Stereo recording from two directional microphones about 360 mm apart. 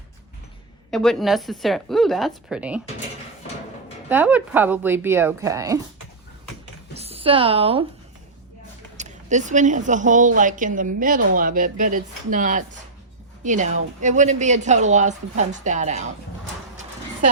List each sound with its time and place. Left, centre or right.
0.9 s speech: centre
4.1 s speech: centre
6.9 s speech: centre
9.0 s a woman's voice: centre